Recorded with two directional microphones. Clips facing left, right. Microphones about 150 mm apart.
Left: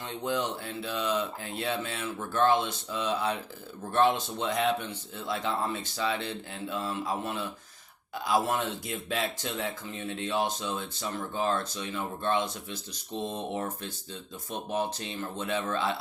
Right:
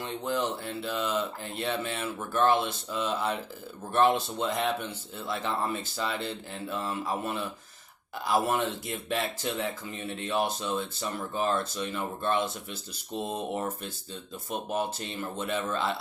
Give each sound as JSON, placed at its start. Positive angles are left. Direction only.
{"t": 0.0, "sound": "speech", "side_deg": 0}
{"t": 6.8, "sound": "speech", "side_deg": -10}
{"t": 14.7, "sound": "speech", "side_deg": 0}